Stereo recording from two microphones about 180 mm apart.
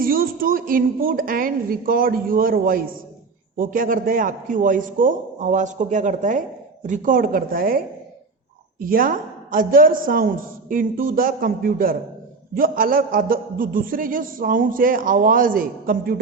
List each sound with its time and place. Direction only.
0.0 s a man's voice: 55° right (ahead or behind)
8.8 s a man's voice: 50° right (ahead or behind)